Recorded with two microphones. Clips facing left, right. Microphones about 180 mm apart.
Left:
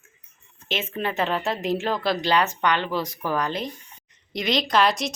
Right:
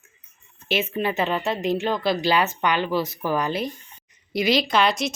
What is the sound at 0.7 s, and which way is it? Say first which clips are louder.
A woman's voice: right 4 dB; 10° right (ahead or behind).